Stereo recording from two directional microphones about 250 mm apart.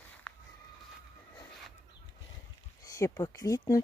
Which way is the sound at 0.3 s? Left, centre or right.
Centre.